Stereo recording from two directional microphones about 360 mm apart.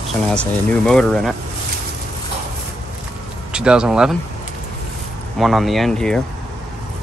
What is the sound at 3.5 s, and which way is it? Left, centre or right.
Speech, centre.